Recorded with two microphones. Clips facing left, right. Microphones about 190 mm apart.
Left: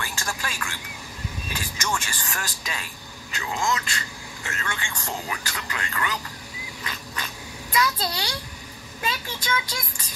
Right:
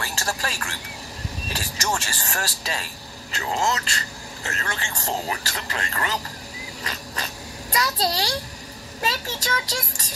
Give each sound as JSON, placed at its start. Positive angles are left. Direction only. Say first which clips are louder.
{"t": 0.0, "sound": "a sound", "louder": "right 3 dB", "side_deg": -40}
{"t": 1.5, "sound": "speech", "louder": "right 2 dB", "side_deg": -40}
{"t": 6.8, "sound": "insect", "louder": "right 2 dB", "side_deg": -40}
{"t": 7.7, "sound": "speech", "louder": "right 1 dB", "side_deg": -40}